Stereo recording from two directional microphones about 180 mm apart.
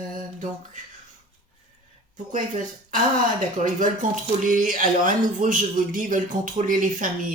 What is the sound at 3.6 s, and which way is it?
Speech, 45° right (ahead or behind).